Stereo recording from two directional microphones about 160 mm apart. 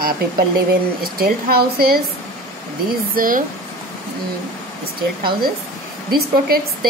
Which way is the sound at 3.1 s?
60° right (ahead or behind).